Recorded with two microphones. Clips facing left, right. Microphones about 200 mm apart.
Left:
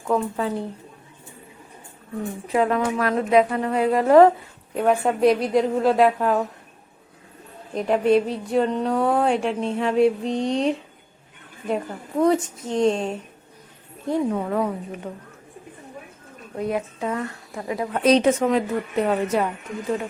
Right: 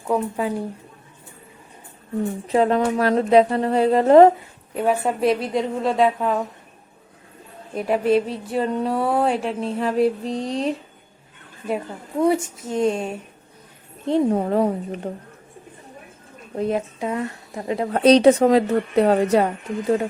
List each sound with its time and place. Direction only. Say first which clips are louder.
0.1 s a woman's voice: right 1 dB; 10° right (ahead or behind)
2.5 s a woman's voice: right 2 dB; 30° right (ahead or behind)
4.8 s speech: left 2 dB; centre (ahead or behind)
7.8 s a woman's voice: even; 5° right (ahead or behind)
14.0 s a woman's voice: right 4 dB; 30° right (ahead or behind)
16.6 s a woman's voice: right 2 dB; 30° right (ahead or behind)